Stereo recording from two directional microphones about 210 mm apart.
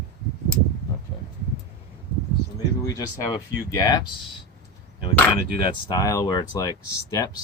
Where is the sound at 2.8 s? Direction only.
15° left (ahead or behind).